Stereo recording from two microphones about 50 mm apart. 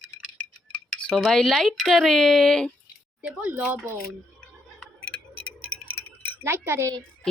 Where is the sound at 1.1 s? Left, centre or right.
Centre.